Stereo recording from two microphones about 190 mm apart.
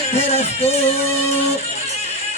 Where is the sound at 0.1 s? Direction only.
35° left (ahead or behind).